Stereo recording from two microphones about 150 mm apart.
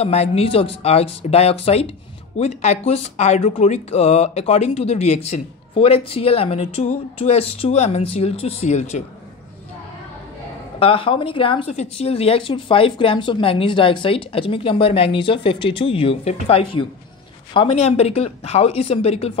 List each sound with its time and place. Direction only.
0.0 s speech: 45° left (ahead or behind)
10.8 s a woman's voice: 35° left (ahead or behind)